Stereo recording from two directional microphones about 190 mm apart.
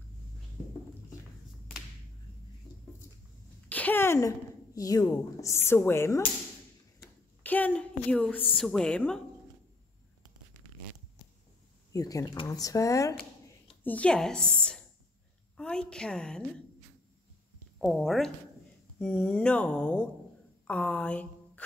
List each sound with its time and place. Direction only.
3.6 s a sound: 10° left (ahead or behind)
4.7 s speech: 20° left (ahead or behind)
7.4 s a woman's voice: 10° left (ahead or behind)
11.9 s speech: 20° left (ahead or behind)
13.8 s a woman's voice: 5° left (ahead or behind)
17.7 s speech: centre (ahead or behind)